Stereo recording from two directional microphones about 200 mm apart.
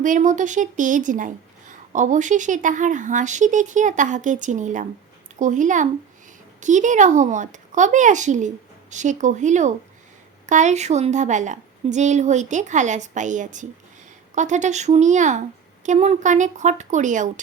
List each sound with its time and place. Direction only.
0.0 s a woman's voice: 40° right (ahead or behind)